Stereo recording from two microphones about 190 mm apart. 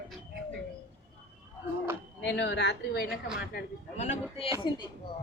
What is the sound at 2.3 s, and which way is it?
Speech, 65° left (ahead or behind).